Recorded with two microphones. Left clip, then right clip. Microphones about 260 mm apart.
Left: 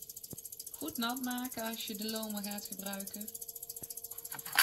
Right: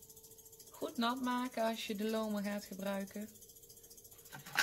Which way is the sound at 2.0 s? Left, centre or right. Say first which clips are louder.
Right 5 dB; right.